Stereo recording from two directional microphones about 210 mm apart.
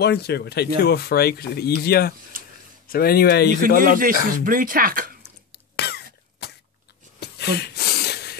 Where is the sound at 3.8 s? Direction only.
40° right (ahead or behind).